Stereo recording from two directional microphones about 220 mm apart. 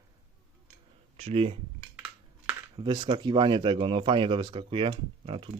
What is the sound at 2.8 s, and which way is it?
Speech, 20° right (ahead or behind).